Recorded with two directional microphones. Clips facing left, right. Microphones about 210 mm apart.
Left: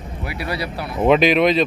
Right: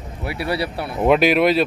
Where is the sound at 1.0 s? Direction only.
5° right (ahead or behind).